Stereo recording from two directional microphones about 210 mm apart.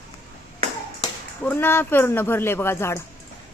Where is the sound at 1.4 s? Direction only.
10° left (ahead or behind).